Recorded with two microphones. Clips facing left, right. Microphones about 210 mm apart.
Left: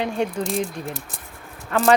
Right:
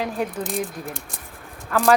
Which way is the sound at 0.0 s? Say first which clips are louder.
Left 2 dB; 5° right (ahead or behind).